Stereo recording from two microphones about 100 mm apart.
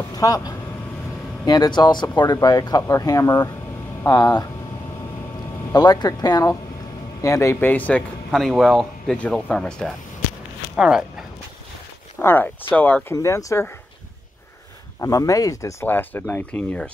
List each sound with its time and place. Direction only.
0.2 s speech: 35° left (ahead or behind)
5.7 s speech: 45° left (ahead or behind)
7.7 s speech: 15° left (ahead or behind)
8.3 s speech: 5° left (ahead or behind)
10.8 s speech: 5° right (ahead or behind)
12.2 s speech: 20° left (ahead or behind)
13.1 s speech: 30° left (ahead or behind)
15.0 s speech: 35° left (ahead or behind); by 16.9 s 15° left (ahead or behind)